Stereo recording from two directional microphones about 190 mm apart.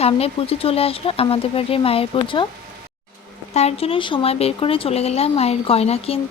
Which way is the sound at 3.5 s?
30° left (ahead or behind).